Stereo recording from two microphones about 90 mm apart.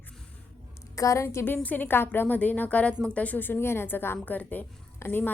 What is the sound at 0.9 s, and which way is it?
Speech, 35° left (ahead or behind).